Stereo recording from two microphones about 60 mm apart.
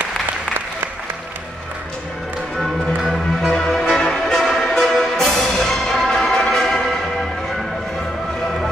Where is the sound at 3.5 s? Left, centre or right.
Centre.